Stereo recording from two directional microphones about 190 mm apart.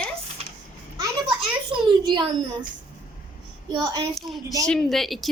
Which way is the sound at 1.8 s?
25° right (ahead or behind).